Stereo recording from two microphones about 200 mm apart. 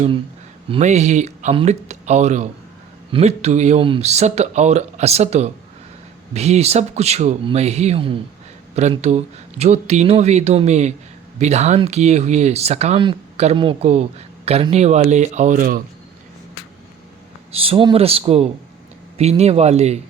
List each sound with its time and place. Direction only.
0.7 s speech: 35° right (ahead or behind)
17.5 s speech: 30° right (ahead or behind)